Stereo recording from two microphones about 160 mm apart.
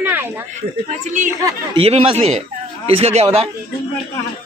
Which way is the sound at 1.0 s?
50° right (ahead or behind).